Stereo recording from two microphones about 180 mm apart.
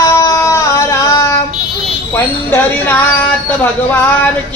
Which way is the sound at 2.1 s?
10° left (ahead or behind).